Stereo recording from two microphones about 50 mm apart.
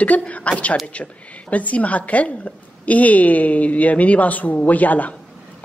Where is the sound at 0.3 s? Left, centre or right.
Left.